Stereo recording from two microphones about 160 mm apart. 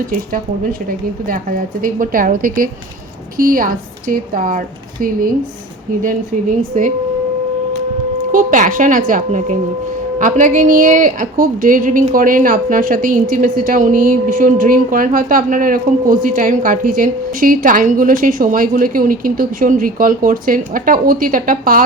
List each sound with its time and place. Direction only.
0.1 s speech: 60° right (ahead or behind)
6.8 s speech: 50° right (ahead or behind)
8.2 s speech: 55° right (ahead or behind)